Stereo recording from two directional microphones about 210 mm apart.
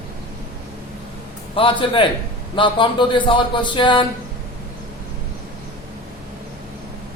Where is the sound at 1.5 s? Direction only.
25° left (ahead or behind).